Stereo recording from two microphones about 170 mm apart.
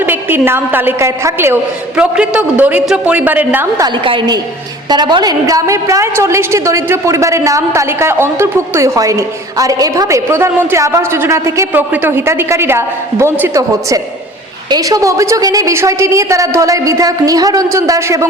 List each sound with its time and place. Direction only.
0.0 s a woman's voice: 10° right (ahead or behind)
2.0 s a woman's voice: 5° right (ahead or behind)
3.8 s a woman's voice: 25° right (ahead or behind)